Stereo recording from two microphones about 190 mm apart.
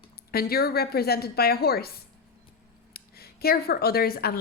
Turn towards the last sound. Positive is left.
turn(degrees=55)  # may be behind; listen again after turning